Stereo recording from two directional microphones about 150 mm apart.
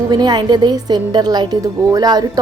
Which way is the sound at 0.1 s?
30° right (ahead or behind).